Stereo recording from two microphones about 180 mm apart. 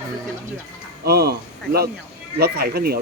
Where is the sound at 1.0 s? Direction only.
60° right (ahead or behind).